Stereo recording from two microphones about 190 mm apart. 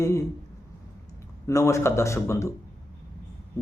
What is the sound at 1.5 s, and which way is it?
Mantra, 15° left (ahead or behind).